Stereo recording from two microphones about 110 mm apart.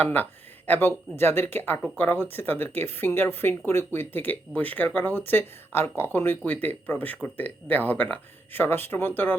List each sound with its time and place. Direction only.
0.0 s speech: 15° left (ahead or behind)